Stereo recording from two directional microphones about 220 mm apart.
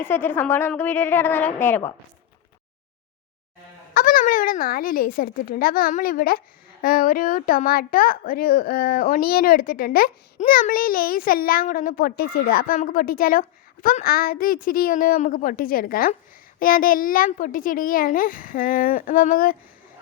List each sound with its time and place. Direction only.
0.0 s a woman's voice: 10° left (ahead or behind)
3.9 s a woman's voice: 40° left (ahead or behind)